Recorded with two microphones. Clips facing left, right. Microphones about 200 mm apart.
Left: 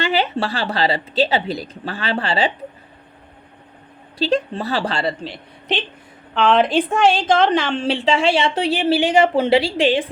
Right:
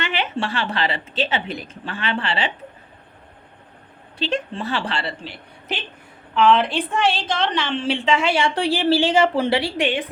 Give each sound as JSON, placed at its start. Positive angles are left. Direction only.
{"t": 0.0, "sound": "a woman's voice", "side_deg": 35}
{"t": 4.2, "sound": "a woman's voice", "side_deg": 35}
{"t": 6.7, "sound": "a woman's voice", "side_deg": 45}